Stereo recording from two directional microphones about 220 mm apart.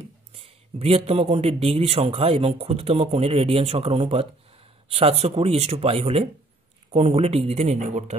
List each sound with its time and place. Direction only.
0.3 s speech: 25° right (ahead or behind)